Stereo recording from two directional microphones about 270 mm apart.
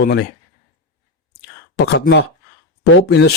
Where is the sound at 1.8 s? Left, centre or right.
Left.